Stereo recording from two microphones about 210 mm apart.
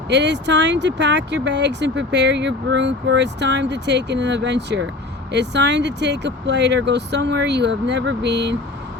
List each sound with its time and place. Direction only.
0.1 s speech: 55° right (ahead or behind)